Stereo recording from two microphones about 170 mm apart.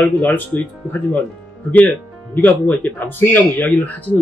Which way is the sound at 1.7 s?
10° left (ahead or behind).